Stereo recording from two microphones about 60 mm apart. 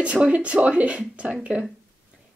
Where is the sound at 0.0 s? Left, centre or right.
Centre.